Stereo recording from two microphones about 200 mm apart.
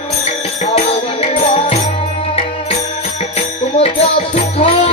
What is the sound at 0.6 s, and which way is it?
Music, 30° left (ahead or behind).